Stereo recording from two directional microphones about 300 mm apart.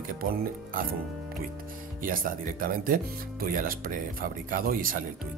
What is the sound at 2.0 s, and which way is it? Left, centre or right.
Speech, right.